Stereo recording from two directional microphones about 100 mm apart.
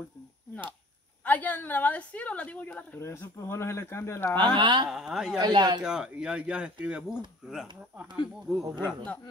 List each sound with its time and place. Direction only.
1.2 s a woman's voice: 15° left (ahead or behind)
3.0 s speech: 30° left (ahead or behind)
4.4 s speech: 55° right (ahead or behind)
4.8 s speech: 5° right (ahead or behind)
5.4 s speech: 50° right (ahead or behind)
5.8 s speech: 5° right (ahead or behind)
8.5 s speech: centre (ahead or behind)